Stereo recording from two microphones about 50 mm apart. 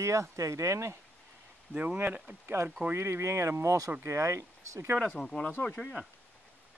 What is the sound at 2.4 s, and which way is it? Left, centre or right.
Speech, right.